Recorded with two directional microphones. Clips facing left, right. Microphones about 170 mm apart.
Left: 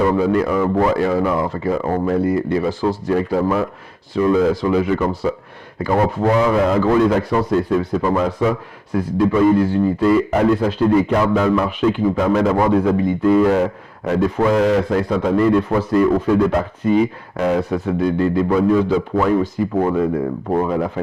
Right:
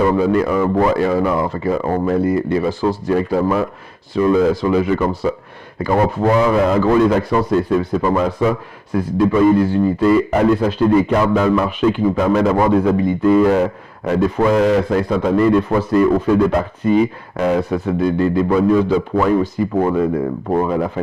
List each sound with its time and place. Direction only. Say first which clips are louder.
0.0 s a man's voice: right 1 dB; 20° right (ahead or behind)